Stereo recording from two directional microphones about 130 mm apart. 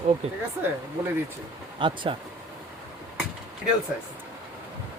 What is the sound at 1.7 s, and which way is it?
Speech, 40° right (ahead or behind).